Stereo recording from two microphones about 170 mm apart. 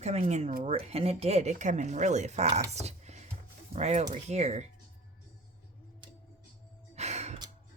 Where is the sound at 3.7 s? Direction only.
40° right (ahead or behind).